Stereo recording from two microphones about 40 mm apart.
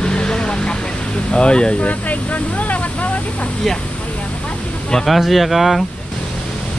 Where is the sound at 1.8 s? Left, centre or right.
Left.